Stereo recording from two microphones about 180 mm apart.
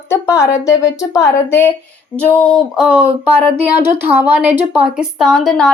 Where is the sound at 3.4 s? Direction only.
10° right (ahead or behind).